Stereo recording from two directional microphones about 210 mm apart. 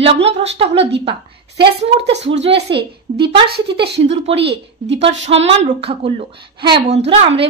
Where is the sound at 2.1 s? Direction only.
55° right (ahead or behind).